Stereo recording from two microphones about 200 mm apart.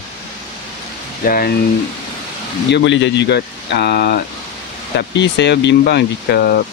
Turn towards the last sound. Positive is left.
turn(degrees=55)  # may be behind; listen again after turning